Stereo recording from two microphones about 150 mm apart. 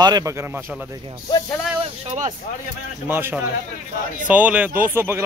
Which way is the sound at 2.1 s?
55° right (ahead or behind).